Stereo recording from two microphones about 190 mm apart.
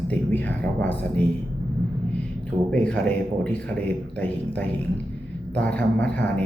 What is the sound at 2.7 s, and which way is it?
Speech, 5° left (ahead or behind).